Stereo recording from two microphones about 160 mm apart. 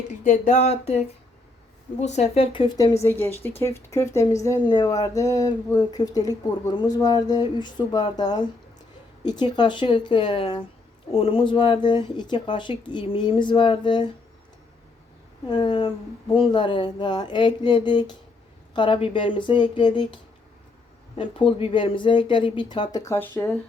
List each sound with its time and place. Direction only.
0.3 s a sound: 45° left (ahead or behind)
2.0 s speech: 45° left (ahead or behind); by 14.1 s 30° left (ahead or behind)
15.4 s speech: 30° left (ahead or behind)
21.2 s speech: 30° left (ahead or behind); by 23.5 s 15° left (ahead or behind)